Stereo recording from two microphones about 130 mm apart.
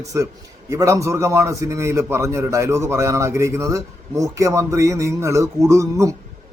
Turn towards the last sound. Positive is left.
turn(degrees=-20)  # may be behind; listen again after turning